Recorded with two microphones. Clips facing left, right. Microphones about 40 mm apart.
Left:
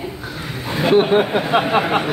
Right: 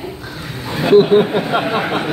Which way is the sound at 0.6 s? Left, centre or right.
Centre.